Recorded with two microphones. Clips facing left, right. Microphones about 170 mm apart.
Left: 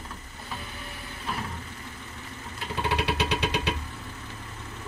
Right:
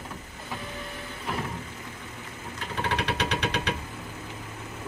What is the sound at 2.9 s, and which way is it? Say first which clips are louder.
Vehicle: left 1 dB; 10° left (ahead or behind).